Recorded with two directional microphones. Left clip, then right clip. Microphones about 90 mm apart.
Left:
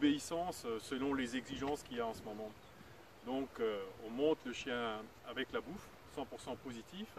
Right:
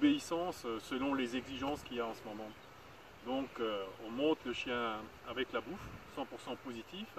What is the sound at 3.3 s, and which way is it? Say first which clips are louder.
Speech: right 1 dB; 30° left (ahead or behind).